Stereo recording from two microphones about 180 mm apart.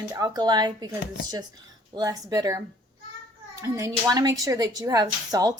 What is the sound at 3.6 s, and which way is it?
Speech, 15° right (ahead or behind).